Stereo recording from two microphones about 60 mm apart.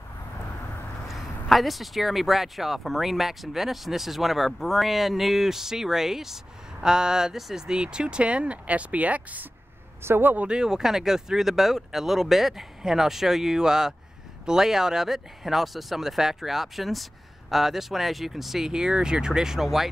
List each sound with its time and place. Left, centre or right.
1.0 s speech: centre; by 9.5 s right
10.0 s a man's voice: right
10.3 s speech: centre